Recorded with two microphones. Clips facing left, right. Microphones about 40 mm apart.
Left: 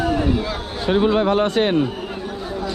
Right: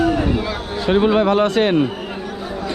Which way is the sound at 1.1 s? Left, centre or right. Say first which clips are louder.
Right 2 dB; right.